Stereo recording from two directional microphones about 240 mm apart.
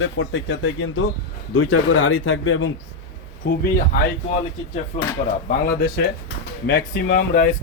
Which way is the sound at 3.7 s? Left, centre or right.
Left.